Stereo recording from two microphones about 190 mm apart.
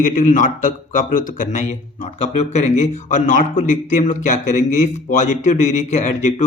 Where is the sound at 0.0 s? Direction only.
45° left (ahead or behind).